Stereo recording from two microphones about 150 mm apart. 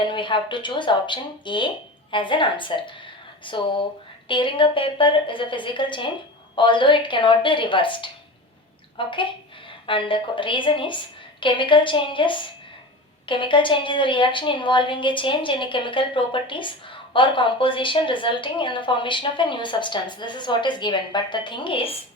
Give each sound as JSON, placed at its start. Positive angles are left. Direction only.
{"t": 0.0, "sound": "a woman's voice", "side_deg": 30}